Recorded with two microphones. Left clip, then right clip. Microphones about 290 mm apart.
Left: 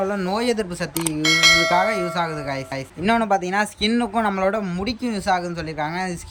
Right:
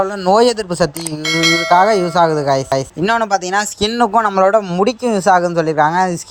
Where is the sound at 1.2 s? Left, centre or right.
Centre.